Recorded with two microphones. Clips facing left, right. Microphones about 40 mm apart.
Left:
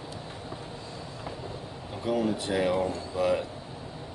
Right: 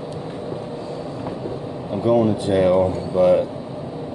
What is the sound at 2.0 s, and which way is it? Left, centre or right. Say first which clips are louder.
Speech: right 10 dB; right.